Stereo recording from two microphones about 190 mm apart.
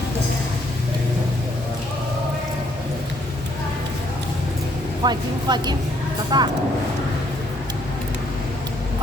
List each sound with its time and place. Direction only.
5.0 s speech: 20° right (ahead or behind)